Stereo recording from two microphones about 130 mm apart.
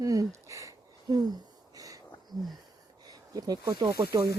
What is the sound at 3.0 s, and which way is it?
Speech, 30° right (ahead or behind).